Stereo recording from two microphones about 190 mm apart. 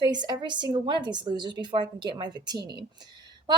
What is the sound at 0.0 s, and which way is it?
A woman's voice, 20° right (ahead or behind).